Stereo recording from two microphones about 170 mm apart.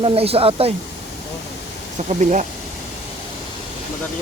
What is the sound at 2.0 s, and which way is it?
Speech, 45° right (ahead or behind).